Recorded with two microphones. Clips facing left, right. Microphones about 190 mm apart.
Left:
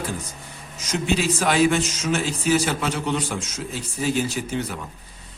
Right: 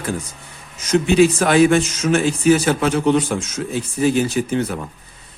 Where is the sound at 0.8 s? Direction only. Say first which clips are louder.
Right 10 dB; 55° right (ahead or behind).